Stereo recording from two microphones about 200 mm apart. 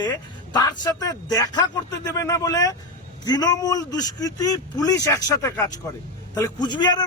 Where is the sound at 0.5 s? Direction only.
20° left (ahead or behind).